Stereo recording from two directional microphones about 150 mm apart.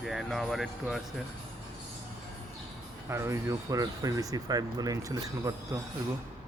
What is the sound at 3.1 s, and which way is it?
Speech, 20° right (ahead or behind).